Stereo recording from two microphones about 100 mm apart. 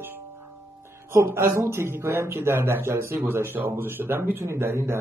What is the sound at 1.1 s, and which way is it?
Speech, 25° right (ahead or behind).